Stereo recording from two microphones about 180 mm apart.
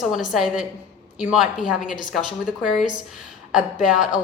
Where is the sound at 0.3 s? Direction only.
Centre (ahead or behind).